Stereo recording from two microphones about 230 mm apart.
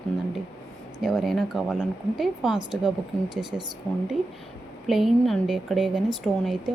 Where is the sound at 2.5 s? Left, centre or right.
Centre.